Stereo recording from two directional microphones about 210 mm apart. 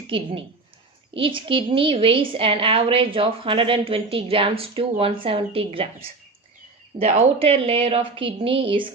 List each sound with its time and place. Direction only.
0.1 s a woman's voice: 25° right (ahead or behind)